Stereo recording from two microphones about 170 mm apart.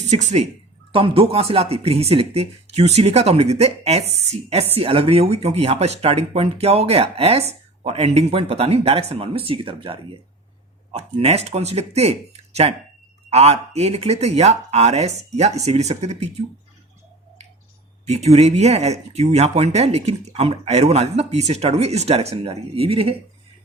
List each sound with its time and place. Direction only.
0.1 s speech: 40° right (ahead or behind)
18.0 s speech: 40° right (ahead or behind)